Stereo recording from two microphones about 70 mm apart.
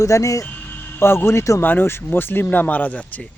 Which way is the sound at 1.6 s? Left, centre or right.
Left.